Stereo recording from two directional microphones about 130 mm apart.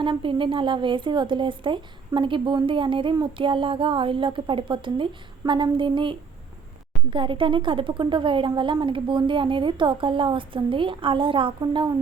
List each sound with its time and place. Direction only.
0.0 s a woman's voice: 40° right (ahead or behind)